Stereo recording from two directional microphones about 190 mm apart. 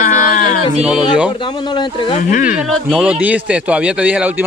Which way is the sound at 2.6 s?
Centre (ahead or behind).